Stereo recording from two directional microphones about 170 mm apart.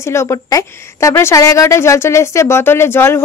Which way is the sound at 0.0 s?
15° left (ahead or behind).